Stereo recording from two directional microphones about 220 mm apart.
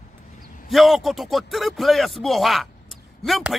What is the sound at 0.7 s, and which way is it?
A man's voice, centre (ahead or behind).